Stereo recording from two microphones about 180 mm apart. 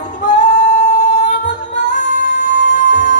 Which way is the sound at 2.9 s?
45° left (ahead or behind).